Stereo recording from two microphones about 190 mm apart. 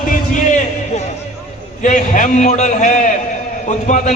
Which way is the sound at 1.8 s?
40° left (ahead or behind).